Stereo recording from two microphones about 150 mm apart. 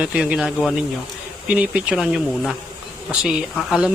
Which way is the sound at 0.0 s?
5° right (ahead or behind).